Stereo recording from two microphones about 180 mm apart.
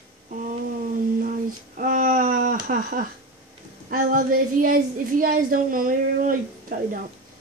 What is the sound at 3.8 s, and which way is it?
A woman's voice, 50° right (ahead or behind).